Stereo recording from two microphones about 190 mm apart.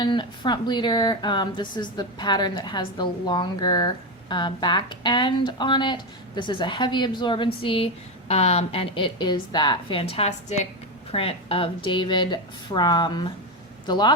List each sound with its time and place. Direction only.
0.0 s speech: 25° left (ahead or behind)